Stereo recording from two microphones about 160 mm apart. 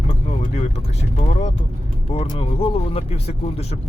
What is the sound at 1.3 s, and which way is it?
Speech, 45° left (ahead or behind).